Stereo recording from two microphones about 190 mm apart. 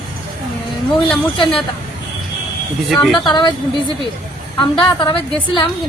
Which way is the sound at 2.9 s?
Centre (ahead or behind).